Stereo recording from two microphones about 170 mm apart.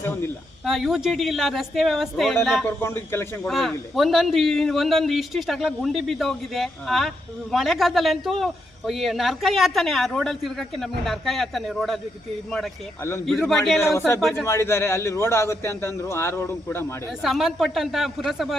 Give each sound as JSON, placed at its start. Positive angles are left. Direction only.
{"t": 0.6, "sound": "a man's voice", "side_deg": 0}
{"t": 2.6, "sound": "a man's voice", "side_deg": 15}
{"t": 3.5, "sound": "a man's voice", "side_deg": 0}
{"t": 13.0, "sound": "a man's voice", "side_deg": 15}
{"t": 13.2, "sound": "a man's voice", "side_deg": 0}
{"t": 14.4, "sound": "a man's voice", "side_deg": 15}
{"t": 17.1, "sound": "a man's voice", "side_deg": 0}